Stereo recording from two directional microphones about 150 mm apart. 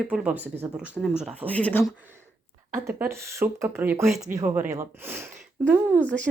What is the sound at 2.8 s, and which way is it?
Speech, 15° right (ahead or behind).